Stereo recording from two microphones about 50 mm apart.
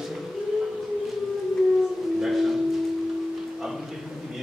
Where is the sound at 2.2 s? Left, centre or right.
Centre.